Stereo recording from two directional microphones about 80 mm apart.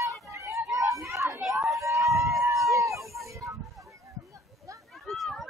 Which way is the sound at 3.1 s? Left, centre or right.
Right.